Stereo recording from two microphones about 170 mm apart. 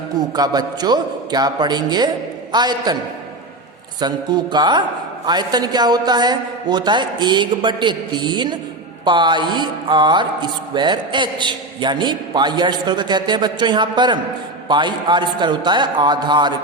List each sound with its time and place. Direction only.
0.2 s speech: 25° right (ahead or behind)
4.0 s speech: 25° right (ahead or behind)